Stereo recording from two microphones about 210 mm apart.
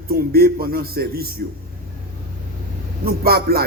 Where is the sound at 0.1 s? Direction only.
45° right (ahead or behind).